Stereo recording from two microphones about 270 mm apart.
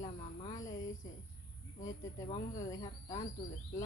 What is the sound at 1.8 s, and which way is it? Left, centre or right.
Speech, centre.